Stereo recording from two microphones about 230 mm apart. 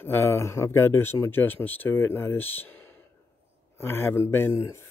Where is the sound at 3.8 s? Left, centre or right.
Centre.